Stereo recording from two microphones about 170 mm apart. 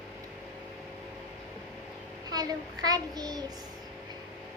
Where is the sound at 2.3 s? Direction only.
20° right (ahead or behind).